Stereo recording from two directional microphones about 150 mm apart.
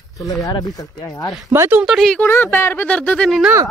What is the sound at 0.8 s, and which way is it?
Speech, 25° left (ahead or behind).